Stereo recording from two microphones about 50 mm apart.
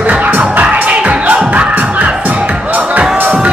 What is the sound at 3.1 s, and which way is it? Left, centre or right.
Music, right.